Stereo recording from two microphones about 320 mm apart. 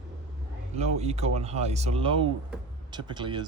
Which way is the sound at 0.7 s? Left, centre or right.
Centre.